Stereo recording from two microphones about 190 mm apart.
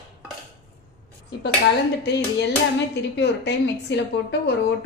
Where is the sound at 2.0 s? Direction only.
65° left (ahead or behind).